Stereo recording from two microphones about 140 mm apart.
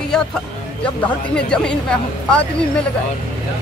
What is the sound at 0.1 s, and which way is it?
Music, 5° left (ahead or behind).